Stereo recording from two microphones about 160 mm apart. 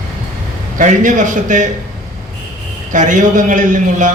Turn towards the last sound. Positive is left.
turn(degrees=-50)  # may be behind; listen again after turning